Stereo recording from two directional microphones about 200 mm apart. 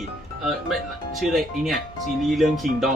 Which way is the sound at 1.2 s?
Centre (ahead or behind).